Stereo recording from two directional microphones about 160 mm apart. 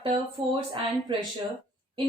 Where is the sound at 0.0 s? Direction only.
35° right (ahead or behind).